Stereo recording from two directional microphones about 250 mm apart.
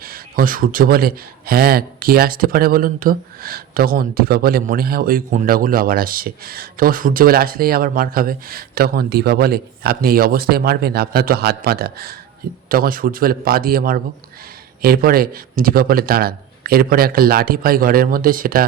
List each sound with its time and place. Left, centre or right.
0.0 s speech: right